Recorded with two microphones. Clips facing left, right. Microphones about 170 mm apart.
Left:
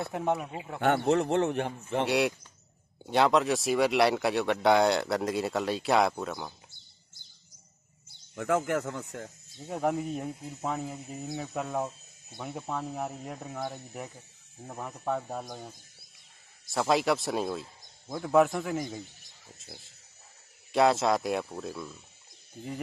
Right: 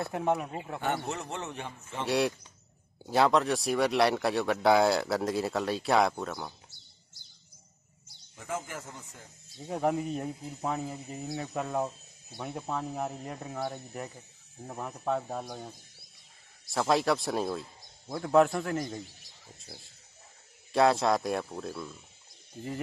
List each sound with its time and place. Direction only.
0.0 s speech: centre (ahead or behind)
0.7 s a man's voice: 65° left (ahead or behind)
2.0 s speech: centre (ahead or behind)
8.4 s speech: 70° left (ahead or behind)
9.6 s speech: centre (ahead or behind)